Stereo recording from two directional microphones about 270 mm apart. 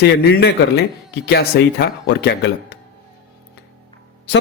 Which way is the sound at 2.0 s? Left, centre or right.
Left.